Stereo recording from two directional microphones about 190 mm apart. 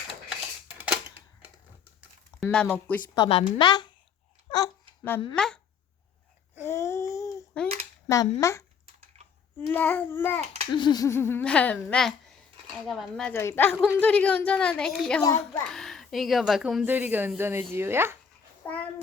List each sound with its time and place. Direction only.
0.3 s typewriter: 10° right (ahead or behind)
2.4 s a child's voice: 5° left (ahead or behind)
3.2 s a woman's voice: 25° left (ahead or behind)
5.4 s a woman's voice: 5° left (ahead or behind)
6.6 s babbling: 15° left (ahead or behind)
8.0 s a child's voice: 20° left (ahead or behind)
10.7 s a child's voice: 25° left (ahead or behind); by 18.2 s 10° right (ahead or behind)
18.6 s a sound: 10° left (ahead or behind)